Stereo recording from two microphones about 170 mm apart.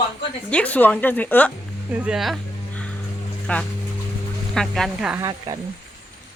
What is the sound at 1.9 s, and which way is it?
Speech, 5° right (ahead or behind).